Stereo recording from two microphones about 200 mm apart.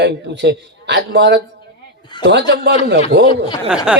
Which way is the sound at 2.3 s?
60° right (ahead or behind).